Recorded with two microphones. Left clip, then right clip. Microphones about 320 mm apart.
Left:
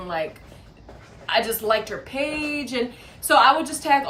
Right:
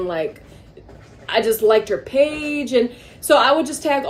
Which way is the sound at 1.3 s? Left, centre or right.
Centre.